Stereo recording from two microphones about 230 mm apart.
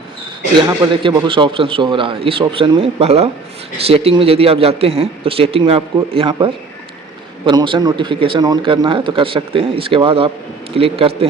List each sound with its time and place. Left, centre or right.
0.8 s a man's voice: centre